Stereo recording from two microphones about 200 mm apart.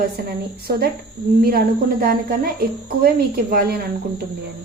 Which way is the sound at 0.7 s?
50° right (ahead or behind).